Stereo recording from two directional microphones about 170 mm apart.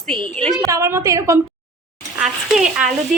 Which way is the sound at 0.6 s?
20° right (ahead or behind).